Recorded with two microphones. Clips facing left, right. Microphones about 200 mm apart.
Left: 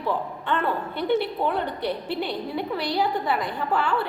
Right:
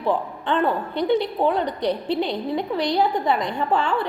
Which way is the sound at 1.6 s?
15° right (ahead or behind).